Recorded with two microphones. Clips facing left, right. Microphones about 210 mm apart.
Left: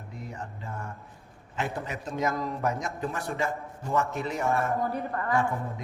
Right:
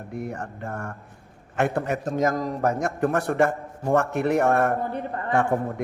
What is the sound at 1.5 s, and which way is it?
A man's voice, 60° right (ahead or behind).